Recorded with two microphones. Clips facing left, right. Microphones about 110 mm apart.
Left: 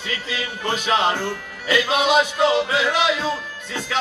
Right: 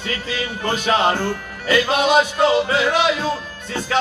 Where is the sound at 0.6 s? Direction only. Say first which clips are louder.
Right 2 dB; 45° right (ahead or behind).